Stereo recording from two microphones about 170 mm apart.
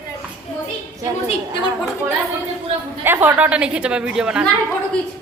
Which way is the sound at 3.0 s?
10° right (ahead or behind).